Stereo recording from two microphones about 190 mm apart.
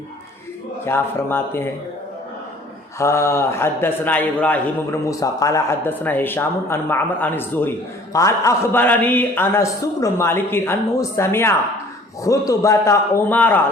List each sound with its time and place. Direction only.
0.9 s a man's voice: 10° left (ahead or behind)
3.0 s a man's voice: 15° left (ahead or behind)